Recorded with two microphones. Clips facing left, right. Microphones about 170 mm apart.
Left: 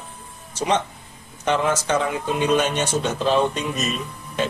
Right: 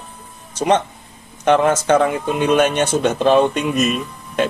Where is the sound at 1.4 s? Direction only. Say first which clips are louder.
Right 7 dB; 55° right (ahead or behind).